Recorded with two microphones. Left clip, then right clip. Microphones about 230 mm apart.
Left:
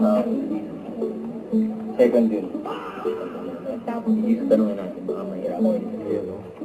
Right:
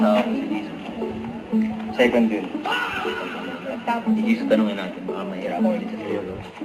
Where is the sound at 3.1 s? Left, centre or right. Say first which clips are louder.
Even; centre.